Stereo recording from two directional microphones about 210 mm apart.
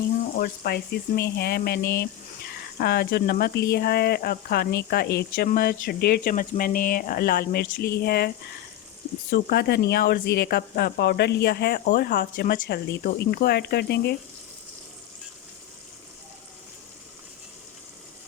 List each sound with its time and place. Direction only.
0.3 s speech: 45° left (ahead or behind)
9.3 s speech: 50° left (ahead or behind)